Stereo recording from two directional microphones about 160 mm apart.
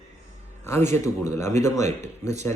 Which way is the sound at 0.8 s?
15° left (ahead or behind).